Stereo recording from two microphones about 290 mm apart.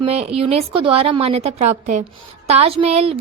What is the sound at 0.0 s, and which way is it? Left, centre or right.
A woman's voice, right.